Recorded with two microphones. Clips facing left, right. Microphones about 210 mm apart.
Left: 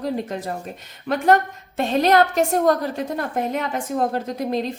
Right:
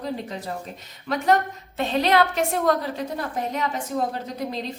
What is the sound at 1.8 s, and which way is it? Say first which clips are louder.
A woman's voice: left 3 dB; 50° left (ahead or behind).